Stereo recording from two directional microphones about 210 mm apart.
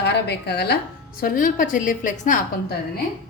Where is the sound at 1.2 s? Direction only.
40° left (ahead or behind).